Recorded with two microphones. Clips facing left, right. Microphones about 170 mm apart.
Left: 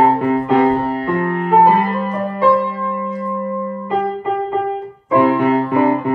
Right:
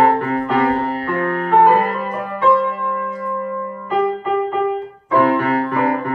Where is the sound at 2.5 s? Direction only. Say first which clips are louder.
Left 1 dB; 20° left (ahead or behind).